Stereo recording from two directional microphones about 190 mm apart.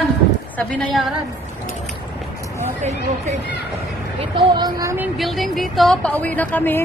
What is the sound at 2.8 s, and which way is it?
A woman's voice, 35° right (ahead or behind).